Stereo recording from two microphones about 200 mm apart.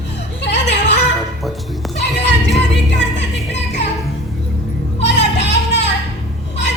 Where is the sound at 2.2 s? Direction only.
60° left (ahead or behind).